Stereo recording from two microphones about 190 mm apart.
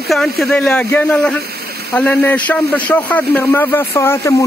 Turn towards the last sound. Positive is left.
turn(degrees=15)  # may be behind; listen again after turning